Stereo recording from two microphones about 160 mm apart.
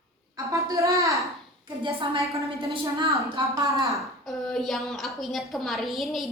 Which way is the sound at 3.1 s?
20° right (ahead or behind).